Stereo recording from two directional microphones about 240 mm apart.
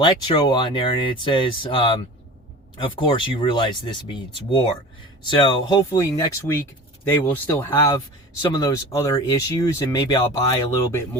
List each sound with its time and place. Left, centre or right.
0.0 s speech: centre